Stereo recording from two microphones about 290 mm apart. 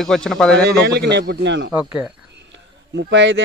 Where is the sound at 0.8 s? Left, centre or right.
Right.